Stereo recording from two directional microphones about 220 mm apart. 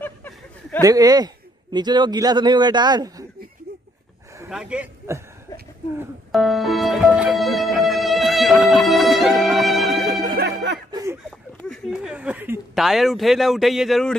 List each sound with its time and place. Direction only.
0.0 s a sound: 10° left (ahead or behind)
0.8 s a man's voice: 15° right (ahead or behind)
4.5 s speech: 5° right (ahead or behind)
6.3 s music: centre (ahead or behind)
10.2 s music: 45° right (ahead or behind)
10.9 s a sound: 15° right (ahead or behind)
11.2 s speech: centre (ahead or behind)